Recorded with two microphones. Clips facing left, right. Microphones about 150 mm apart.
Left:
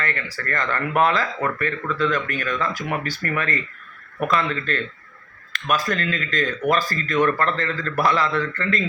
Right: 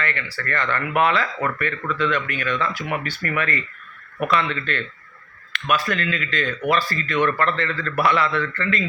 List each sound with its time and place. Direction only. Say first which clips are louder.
0.0 s speech: even; 40° left (ahead or behind)